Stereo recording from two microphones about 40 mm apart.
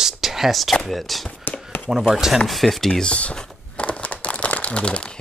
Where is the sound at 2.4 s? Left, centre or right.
Centre.